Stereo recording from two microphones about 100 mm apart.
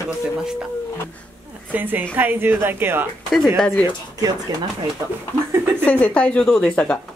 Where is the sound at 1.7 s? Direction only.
20° right (ahead or behind).